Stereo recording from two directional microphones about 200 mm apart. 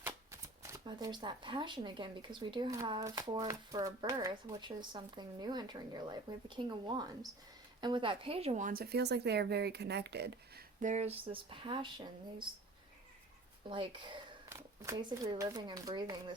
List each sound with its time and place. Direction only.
0.0 s speech: 15° right (ahead or behind); by 10.6 s 55° right (ahead or behind)
10.8 s speech: 35° right (ahead or behind); by 12.5 s 20° right (ahead or behind)
13.7 s speech: 25° right (ahead or behind)